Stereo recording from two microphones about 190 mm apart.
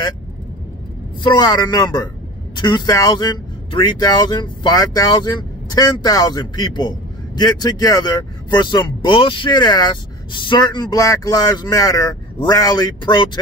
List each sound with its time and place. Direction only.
1.2 s speech: 20° left (ahead or behind)